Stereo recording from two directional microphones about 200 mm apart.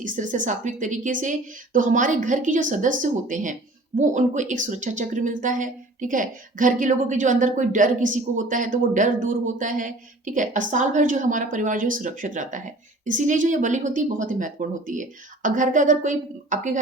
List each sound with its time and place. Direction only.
0.0 s speech: 40° right (ahead or behind)